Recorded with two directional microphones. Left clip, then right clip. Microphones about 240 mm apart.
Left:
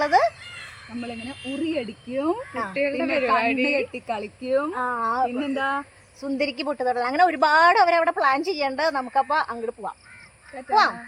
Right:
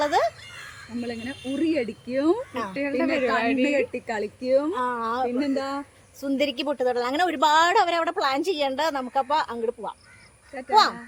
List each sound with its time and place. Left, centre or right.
0.0 s a sound: centre
1.0 s speech: centre
3.0 s a woman's voice: centre
3.9 s speech: centre
5.4 s speech: centre
6.2 s a woman's voice: centre
10.5 s speech: centre